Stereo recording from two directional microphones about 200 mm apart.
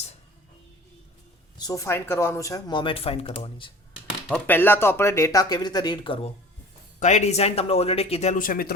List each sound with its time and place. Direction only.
1.5 s speech: 15° left (ahead or behind)
4.4 s speech: 10° left (ahead or behind)
7.0 s speech: 35° left (ahead or behind)